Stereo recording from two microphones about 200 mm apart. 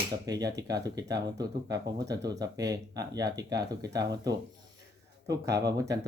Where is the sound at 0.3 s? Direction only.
20° right (ahead or behind).